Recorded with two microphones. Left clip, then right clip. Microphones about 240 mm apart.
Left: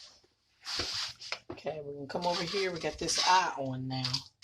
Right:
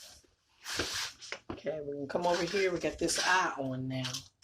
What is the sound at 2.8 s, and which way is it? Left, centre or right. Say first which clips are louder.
Speech: even; left.